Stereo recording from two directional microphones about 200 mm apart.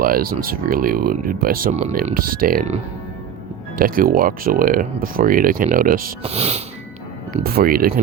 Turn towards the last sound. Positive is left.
turn(degrees=-45)  # may be behind; listen again after turning